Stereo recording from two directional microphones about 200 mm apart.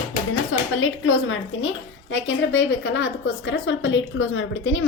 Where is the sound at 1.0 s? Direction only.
75° left (ahead or behind).